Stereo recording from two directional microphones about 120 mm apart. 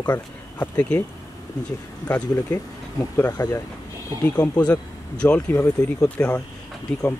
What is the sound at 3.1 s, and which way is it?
Speech, 30° left (ahead or behind).